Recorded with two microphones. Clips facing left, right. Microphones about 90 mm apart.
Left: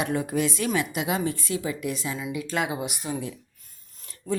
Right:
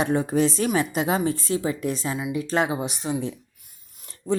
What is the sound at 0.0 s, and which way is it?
Speech, 30° right (ahead or behind).